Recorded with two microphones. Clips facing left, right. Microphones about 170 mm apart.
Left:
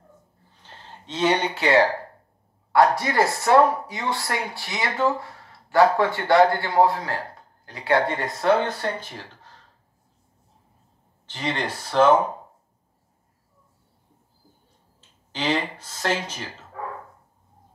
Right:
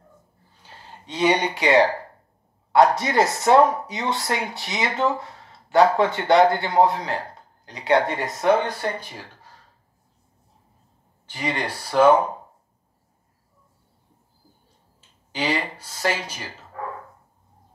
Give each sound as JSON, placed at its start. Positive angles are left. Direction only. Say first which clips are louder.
{"t": 0.6, "sound": "a sound", "louder": "even", "side_deg": -10}
{"t": 2.7, "sound": "speech", "louder": "right 2 dB", "side_deg": -20}
{"t": 11.2, "sound": "speech", "louder": "even", "side_deg": -10}
{"t": 15.0, "sound": "speech", "louder": "right 3 dB", "side_deg": -10}